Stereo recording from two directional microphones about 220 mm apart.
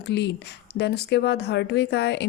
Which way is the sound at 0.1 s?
50° left (ahead or behind).